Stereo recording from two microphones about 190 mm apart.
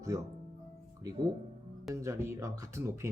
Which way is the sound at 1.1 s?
20° right (ahead or behind).